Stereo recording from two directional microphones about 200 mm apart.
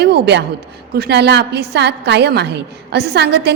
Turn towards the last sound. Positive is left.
turn(degrees=-55)  # may be behind; listen again after turning